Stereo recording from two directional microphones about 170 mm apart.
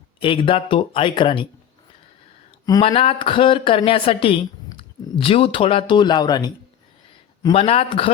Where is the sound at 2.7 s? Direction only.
30° left (ahead or behind).